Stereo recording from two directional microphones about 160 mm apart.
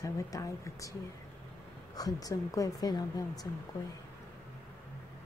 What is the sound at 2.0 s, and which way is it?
A woman's voice, 25° left (ahead or behind).